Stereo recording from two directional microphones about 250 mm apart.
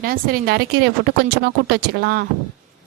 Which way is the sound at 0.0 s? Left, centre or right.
Right.